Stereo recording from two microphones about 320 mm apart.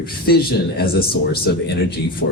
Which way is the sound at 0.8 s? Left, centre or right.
Left.